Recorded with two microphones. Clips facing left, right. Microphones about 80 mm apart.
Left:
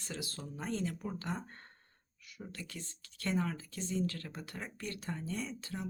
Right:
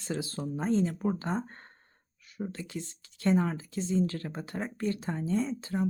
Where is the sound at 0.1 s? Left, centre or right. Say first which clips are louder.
Right 10 dB; right.